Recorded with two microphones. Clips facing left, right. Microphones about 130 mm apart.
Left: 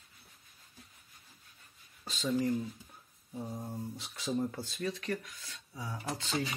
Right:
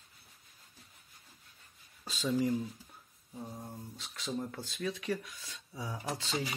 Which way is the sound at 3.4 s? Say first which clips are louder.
Left 4 dB; 15° left (ahead or behind).